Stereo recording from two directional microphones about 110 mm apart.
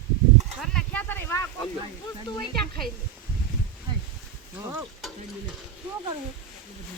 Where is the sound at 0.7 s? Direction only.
15° left (ahead or behind).